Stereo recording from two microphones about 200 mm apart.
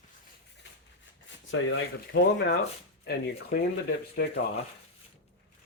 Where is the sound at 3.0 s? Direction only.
55° left (ahead or behind).